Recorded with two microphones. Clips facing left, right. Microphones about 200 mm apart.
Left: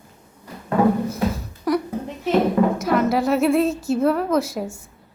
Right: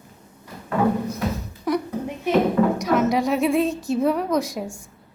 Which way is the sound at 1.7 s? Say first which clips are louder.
Left 2 dB; centre (ahead or behind).